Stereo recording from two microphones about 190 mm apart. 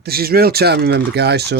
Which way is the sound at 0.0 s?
55° right (ahead or behind).